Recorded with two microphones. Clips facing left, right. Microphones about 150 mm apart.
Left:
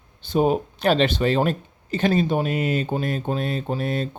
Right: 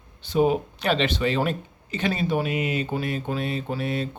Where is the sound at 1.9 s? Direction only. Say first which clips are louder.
Left 4 dB; 45° left (ahead or behind).